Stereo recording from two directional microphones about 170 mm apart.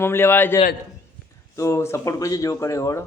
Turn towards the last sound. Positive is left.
turn(degrees=15)  # may be behind; listen again after turning